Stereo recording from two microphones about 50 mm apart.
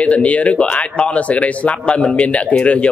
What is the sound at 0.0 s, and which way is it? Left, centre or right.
A man's voice, left.